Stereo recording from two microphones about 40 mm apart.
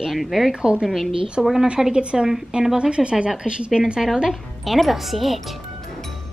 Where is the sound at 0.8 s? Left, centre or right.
Centre.